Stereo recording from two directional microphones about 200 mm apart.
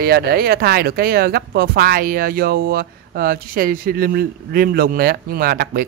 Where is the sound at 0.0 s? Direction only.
50° right (ahead or behind).